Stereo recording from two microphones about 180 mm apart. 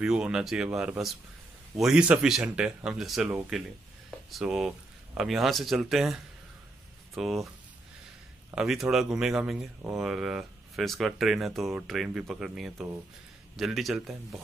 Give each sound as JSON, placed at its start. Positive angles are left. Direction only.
{"t": 0.0, "sound": "speech", "side_deg": -5}
{"t": 7.2, "sound": "speech", "side_deg": 0}
{"t": 8.5, "sound": "speech", "side_deg": 0}